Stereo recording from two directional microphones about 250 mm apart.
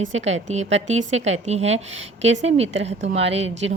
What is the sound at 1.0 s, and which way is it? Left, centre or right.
Speech, right.